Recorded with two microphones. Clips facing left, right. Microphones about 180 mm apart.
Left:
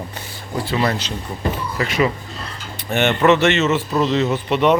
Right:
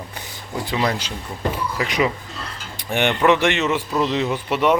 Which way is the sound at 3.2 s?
10° right (ahead or behind).